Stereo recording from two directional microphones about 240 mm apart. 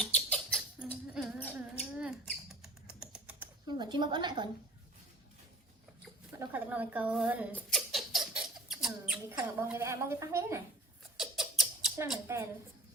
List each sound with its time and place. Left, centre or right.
0.0 s rodents: centre
1.8 s a sound: centre
2.6 s typing: centre
3.7 s a woman's voice: centre
6.3 s a woman's voice: centre
7.5 s rodents: centre
9.6 s a woman's voice: centre
11.2 s a sound: centre